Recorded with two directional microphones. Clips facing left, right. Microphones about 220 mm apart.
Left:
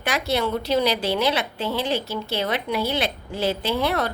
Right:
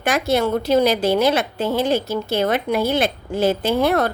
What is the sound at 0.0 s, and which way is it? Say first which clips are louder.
A woman's voice: right 5 dB; 50° right (ahead or behind).